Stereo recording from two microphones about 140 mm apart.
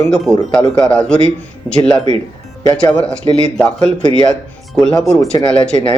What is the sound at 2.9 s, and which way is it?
A man's voice, 5° left (ahead or behind).